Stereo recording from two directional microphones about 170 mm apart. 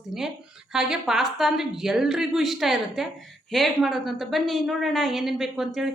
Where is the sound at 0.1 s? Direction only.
5° right (ahead or behind).